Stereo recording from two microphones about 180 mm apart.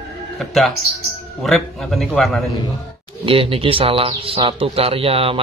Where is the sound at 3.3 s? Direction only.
30° right (ahead or behind).